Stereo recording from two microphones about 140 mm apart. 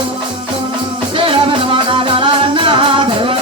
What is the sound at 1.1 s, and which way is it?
Music, 40° right (ahead or behind).